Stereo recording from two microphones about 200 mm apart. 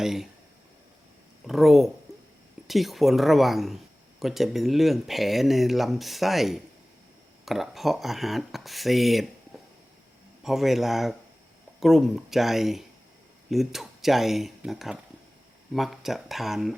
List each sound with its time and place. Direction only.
0.0 s speech: centre (ahead or behind)
1.5 s speech: centre (ahead or behind)
2.1 s a sound: 15° right (ahead or behind)
2.6 s speech: centre (ahead or behind)
10.4 s speech: centre (ahead or behind)